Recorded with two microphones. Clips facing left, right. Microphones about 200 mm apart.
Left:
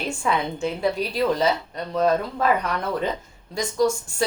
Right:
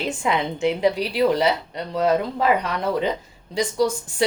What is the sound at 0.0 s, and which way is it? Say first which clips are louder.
A woman's voice: right 1 dB; 20° right (ahead or behind).